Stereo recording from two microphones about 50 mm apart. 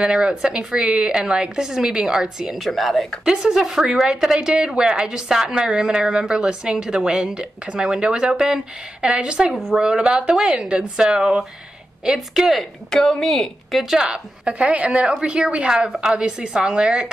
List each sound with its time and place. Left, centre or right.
0.0 s a woman's voice: centre
3.3 s a woman's voice: centre
9.5 s speech: centre
9.8 s a woman's voice: right
12.2 s speech: centre
12.9 s a woman's voice: centre
13.3 s speech: centre
14.4 s a woman's voice: right